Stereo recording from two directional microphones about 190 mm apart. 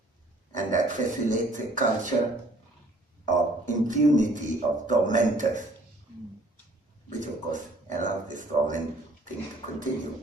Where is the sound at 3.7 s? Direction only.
40° right (ahead or behind).